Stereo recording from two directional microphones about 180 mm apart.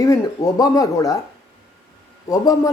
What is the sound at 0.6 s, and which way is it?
Speech, 20° left (ahead or behind).